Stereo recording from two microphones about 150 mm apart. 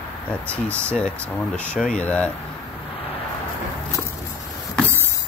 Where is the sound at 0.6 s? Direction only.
15° right (ahead or behind).